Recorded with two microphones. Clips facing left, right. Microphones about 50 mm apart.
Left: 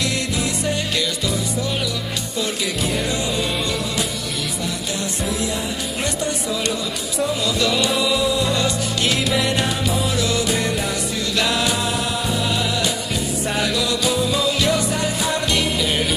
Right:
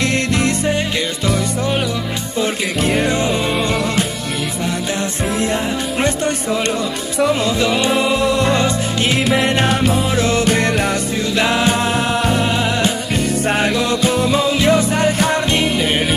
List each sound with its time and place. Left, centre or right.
2.8 s music: right
6.0 s music: right
7.4 s music: right
8.3 s music: right
8.5 s music: right
11.3 s music: right
15.6 s music: right